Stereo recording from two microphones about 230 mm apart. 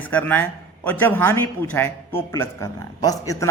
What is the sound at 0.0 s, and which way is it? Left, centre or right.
A man's voice, centre.